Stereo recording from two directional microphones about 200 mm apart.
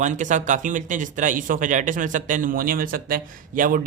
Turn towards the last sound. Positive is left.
turn(degrees=-45)  # may be behind; listen again after turning